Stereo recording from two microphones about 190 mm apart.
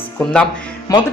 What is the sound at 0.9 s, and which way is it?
Speech, 20° left (ahead or behind).